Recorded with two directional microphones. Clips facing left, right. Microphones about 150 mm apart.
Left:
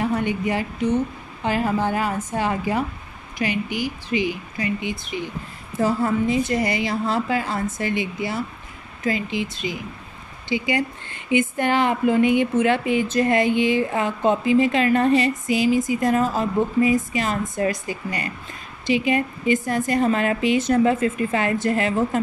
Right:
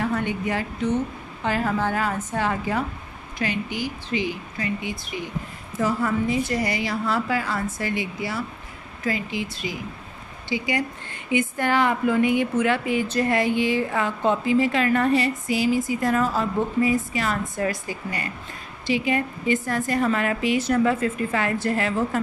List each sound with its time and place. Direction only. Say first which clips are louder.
0.0 s a woman's voice: left 2 dB; 15° left (ahead or behind)